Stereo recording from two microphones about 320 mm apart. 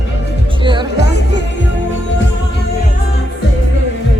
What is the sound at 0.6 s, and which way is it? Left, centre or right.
Speech, centre.